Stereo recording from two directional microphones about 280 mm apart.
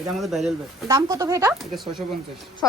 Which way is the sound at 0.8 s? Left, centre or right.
Centre.